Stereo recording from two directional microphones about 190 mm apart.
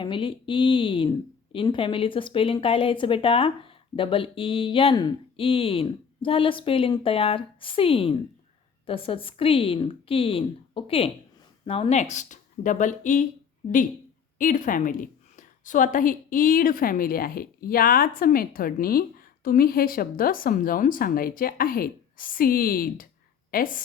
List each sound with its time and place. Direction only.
0.0 s speech: 25° left (ahead or behind)
14.3 s a woman's voice: 45° left (ahead or behind)